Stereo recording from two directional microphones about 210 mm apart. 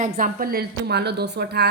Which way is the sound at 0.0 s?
40° right (ahead or behind).